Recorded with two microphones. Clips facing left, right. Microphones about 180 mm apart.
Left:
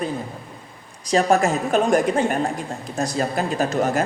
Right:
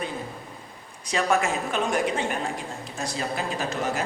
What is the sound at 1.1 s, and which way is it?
A man's voice, 40° left (ahead or behind).